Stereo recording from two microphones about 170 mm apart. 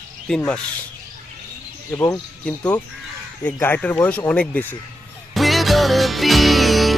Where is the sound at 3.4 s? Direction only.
10° left (ahead or behind).